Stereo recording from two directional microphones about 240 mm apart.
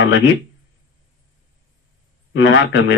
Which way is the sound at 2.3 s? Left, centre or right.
Left.